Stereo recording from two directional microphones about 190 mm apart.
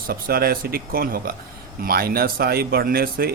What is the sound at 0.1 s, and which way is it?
Speech, 50° right (ahead or behind).